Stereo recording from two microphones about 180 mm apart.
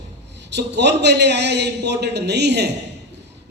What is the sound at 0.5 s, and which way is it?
A man's voice, 70° right (ahead or behind).